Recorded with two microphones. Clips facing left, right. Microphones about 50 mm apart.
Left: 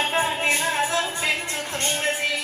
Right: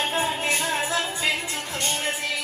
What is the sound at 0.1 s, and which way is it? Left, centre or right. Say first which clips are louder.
Music: left 2 dB; left.